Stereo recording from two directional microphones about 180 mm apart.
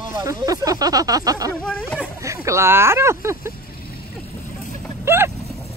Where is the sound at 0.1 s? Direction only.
20° right (ahead or behind).